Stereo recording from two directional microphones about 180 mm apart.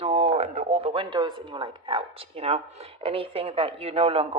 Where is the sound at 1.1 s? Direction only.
25° right (ahead or behind).